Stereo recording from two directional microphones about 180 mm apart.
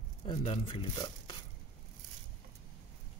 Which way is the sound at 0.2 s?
30° left (ahead or behind).